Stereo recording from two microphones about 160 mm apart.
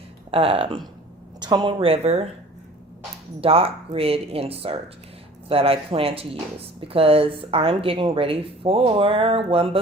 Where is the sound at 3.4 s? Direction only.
35° right (ahead or behind).